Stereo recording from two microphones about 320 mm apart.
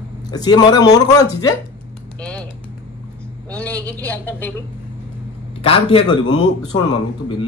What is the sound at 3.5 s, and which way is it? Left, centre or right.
Speech, centre.